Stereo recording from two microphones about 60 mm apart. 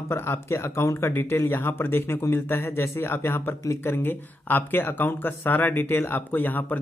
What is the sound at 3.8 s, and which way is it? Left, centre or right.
Speech, left.